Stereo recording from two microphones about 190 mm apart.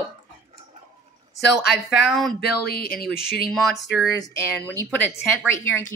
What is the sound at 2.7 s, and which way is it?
Speech, 50° left (ahead or behind).